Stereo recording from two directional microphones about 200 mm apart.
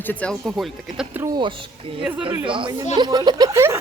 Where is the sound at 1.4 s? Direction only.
25° right (ahead or behind).